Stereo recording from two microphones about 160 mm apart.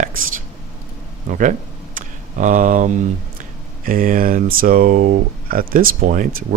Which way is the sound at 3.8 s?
60° right (ahead or behind).